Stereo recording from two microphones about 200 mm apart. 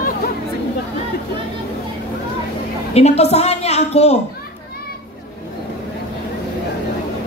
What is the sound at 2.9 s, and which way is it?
A woman's voice, 30° left (ahead or behind).